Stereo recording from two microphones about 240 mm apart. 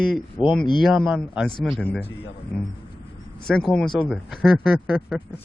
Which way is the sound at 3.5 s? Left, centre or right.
Centre.